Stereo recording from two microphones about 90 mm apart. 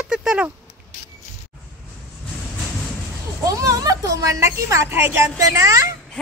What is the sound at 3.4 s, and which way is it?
A child's voice, 40° right (ahead or behind).